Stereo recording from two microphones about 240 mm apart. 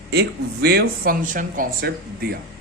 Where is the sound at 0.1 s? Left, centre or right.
Right.